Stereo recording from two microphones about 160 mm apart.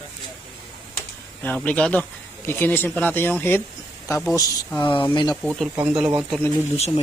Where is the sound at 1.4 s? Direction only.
10° left (ahead or behind).